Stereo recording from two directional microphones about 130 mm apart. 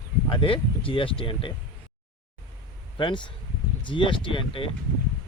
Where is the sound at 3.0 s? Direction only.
35° left (ahead or behind).